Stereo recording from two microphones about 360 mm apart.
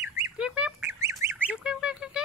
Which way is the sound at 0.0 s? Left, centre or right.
Centre.